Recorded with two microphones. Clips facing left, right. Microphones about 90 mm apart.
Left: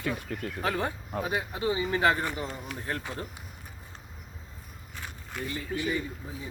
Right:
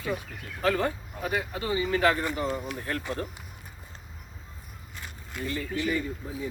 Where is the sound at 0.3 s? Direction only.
60° left (ahead or behind).